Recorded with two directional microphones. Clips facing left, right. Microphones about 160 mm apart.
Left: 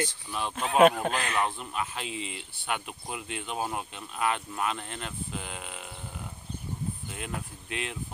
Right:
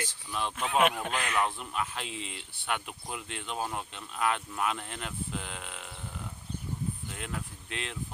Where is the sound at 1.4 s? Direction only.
Centre (ahead or behind).